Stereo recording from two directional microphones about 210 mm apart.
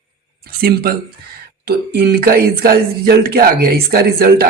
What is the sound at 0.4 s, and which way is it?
Speech, 45° right (ahead or behind).